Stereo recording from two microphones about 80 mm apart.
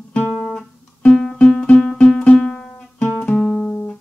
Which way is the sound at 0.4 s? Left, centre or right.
Centre.